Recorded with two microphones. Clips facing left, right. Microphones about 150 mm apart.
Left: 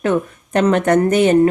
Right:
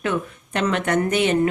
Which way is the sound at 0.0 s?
40° left (ahead or behind).